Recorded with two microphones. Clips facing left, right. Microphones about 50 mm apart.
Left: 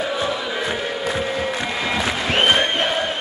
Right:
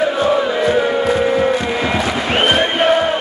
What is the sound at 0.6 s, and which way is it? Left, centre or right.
Music, centre.